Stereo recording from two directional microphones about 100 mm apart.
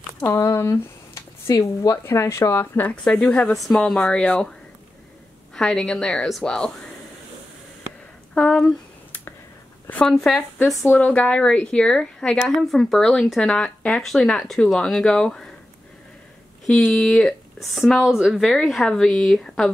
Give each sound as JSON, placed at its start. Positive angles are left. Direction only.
{"t": 0.2, "sound": "speech", "side_deg": 25}
{"t": 2.9, "sound": "a woman's voice", "side_deg": 5}
{"t": 5.5, "sound": "speech", "side_deg": 5}
{"t": 8.4, "sound": "speech", "side_deg": 5}
{"t": 9.8, "sound": "speech", "side_deg": 15}
{"t": 10.1, "sound": "speech", "side_deg": 5}
{"t": 10.9, "sound": "a woman's voice", "side_deg": 15}
{"t": 16.9, "sound": "speech", "side_deg": 5}